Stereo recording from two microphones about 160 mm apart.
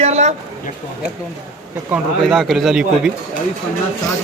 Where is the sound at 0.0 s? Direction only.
45° right (ahead or behind).